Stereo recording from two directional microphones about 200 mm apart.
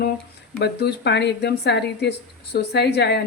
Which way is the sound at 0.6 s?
55° left (ahead or behind).